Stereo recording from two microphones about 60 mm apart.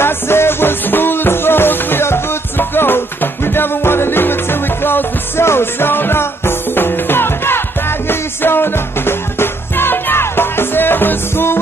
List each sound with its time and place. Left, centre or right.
0.0 s music: left